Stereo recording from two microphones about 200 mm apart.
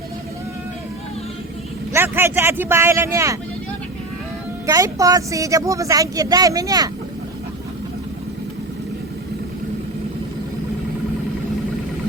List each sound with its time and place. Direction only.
1.9 s speech: 10° right (ahead or behind)
4.6 s speech: 15° right (ahead or behind)